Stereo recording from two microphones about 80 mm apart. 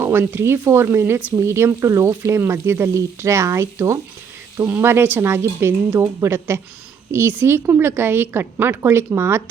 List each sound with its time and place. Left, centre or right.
0.0 s a woman's voice: right